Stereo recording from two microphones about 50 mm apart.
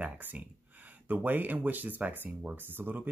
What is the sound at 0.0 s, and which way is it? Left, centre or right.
Speech, right.